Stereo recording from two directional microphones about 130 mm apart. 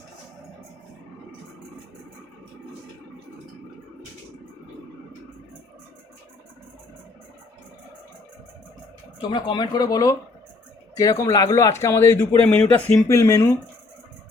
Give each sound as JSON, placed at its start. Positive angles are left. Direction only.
{"t": 9.3, "sound": "speech", "side_deg": 35}
{"t": 13.1, "sound": "speech", "side_deg": 25}